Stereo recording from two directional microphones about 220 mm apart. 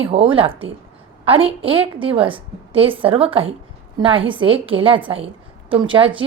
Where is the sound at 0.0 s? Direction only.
25° right (ahead or behind).